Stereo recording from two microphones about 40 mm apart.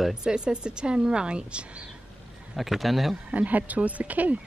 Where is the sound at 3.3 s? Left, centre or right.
Right.